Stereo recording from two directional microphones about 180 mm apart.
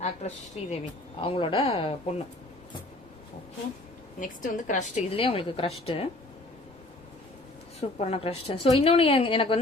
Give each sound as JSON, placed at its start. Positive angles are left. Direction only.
{"t": 0.0, "sound": "a woman's voice", "side_deg": 35}
{"t": 4.2, "sound": "a woman's voice", "side_deg": 45}
{"t": 5.1, "sound": "a woman's voice", "side_deg": 30}
{"t": 7.8, "sound": "a woman's voice", "side_deg": 35}